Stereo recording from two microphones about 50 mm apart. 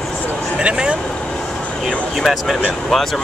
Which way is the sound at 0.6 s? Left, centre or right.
Right.